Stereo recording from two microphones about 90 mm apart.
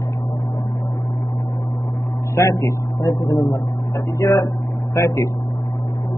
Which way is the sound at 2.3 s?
35° left (ahead or behind).